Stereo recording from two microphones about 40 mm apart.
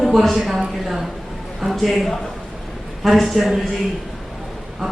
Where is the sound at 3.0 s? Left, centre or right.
Centre.